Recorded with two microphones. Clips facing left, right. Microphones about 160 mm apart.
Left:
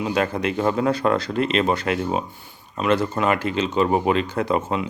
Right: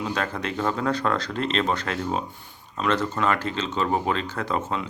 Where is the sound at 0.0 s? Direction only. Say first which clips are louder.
Left 6 dB; 15° left (ahead or behind).